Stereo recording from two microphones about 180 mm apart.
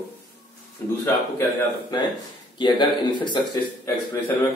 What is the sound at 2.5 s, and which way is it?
Speech, 25° left (ahead or behind).